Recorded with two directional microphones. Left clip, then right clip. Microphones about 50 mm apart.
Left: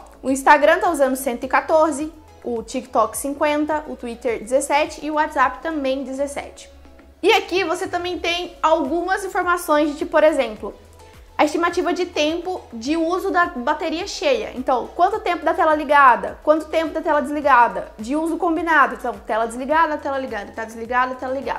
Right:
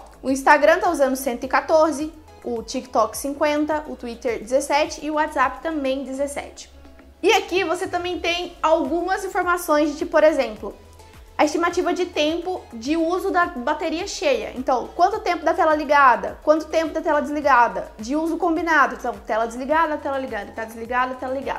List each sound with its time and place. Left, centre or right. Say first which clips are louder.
0.3 s a woman's voice: left 1 dB; left; by 11.8 s centre
11.8 s a woman's voice: left 1 dB; left
14.6 s a woman's voice: even; left
17.4 s a woman's voice: left 2 dB; left
18.2 s a woman's voice: left 1 dB; left